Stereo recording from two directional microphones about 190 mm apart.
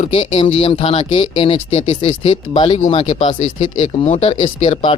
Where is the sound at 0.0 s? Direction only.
30° left (ahead or behind).